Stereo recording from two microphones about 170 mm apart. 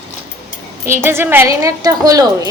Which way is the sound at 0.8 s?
15° right (ahead or behind).